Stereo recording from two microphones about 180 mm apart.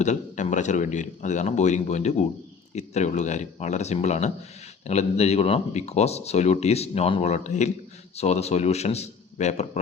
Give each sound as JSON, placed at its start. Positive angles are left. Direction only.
{"t": 0.0, "sound": "speech", "side_deg": 40}